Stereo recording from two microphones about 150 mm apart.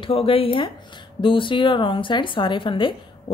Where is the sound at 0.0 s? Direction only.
40° left (ahead or behind).